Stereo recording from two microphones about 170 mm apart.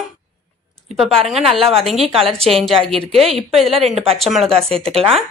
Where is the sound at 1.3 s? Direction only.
Centre (ahead or behind).